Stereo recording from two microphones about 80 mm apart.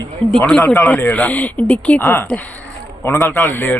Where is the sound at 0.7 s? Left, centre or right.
Left.